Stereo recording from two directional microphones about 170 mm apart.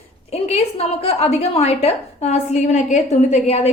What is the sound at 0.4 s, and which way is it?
A woman's voice, 40° left (ahead or behind).